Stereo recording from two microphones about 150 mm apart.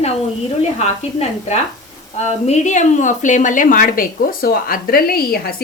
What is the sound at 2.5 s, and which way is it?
A woman's voice, 55° left (ahead or behind).